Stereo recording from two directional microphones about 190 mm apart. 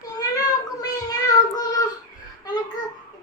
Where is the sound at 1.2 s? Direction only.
20° left (ahead or behind).